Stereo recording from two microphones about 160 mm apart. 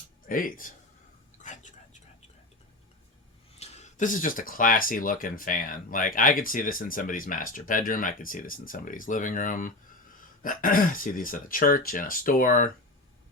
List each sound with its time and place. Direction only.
0.3 s speech: 60° left (ahead or behind)
1.4 s a sound: 50° left (ahead or behind)
3.6 s speech: 45° left (ahead or behind)